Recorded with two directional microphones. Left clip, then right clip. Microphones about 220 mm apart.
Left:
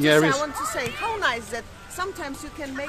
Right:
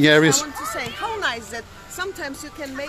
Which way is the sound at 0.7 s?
10° left (ahead or behind).